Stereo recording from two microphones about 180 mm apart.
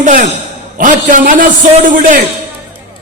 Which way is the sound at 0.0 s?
45° right (ahead or behind).